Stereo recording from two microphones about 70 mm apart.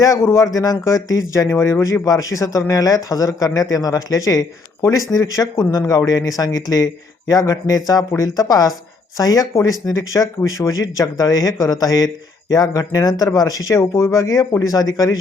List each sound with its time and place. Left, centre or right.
0.2 s speech: left